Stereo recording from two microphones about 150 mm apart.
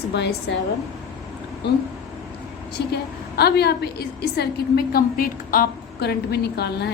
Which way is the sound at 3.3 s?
90° left.